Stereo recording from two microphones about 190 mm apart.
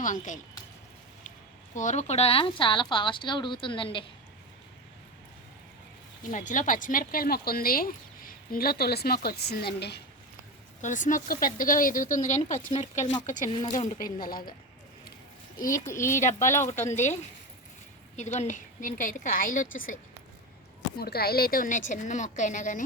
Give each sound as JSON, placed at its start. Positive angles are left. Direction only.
{"t": 0.0, "sound": "a woman's voice", "side_deg": 40}
{"t": 1.7, "sound": "speech", "side_deg": 40}
{"t": 6.3, "sound": "a woman's voice", "side_deg": 40}
{"t": 10.8, "sound": "a woman's voice", "side_deg": 40}
{"t": 15.5, "sound": "a woman's voice", "side_deg": 45}
{"t": 15.9, "sound": "speech", "side_deg": 15}
{"t": 16.2, "sound": "speech", "side_deg": 40}
{"t": 18.2, "sound": "a woman's voice", "side_deg": 40}
{"t": 21.0, "sound": "a woman's voice", "side_deg": 55}